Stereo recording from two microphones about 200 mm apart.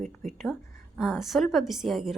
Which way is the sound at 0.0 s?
40° right (ahead or behind).